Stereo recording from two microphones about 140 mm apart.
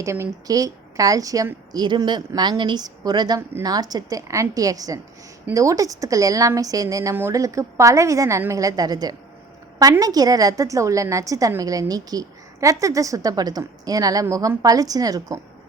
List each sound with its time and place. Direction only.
0.0 s a woman's voice: 20° right (ahead or behind)